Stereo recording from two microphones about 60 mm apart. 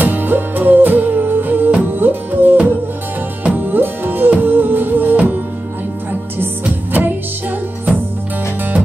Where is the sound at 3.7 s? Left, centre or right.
Right.